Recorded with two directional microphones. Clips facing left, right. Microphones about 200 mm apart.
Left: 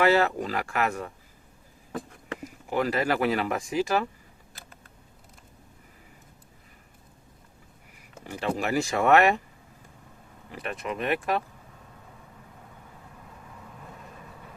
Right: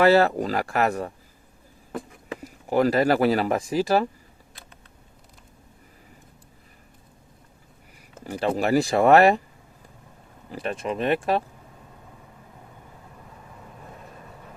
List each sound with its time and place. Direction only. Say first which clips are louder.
0.0 s speech: right 5 dB; 35° right (ahead or behind)
1.9 s a sound: right 2 dB; 5° right (ahead or behind)
2.4 s speech: right 7 dB; 35° right (ahead or behind)
8.3 s speech: right 6 dB; 35° right (ahead or behind)
10.5 s speech: right 5 dB; 30° right (ahead or behind)